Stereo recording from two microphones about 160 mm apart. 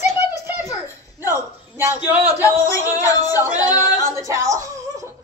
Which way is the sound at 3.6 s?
25° left (ahead or behind).